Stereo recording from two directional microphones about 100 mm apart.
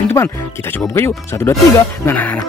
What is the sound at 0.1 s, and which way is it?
Speech, 25° left (ahead or behind).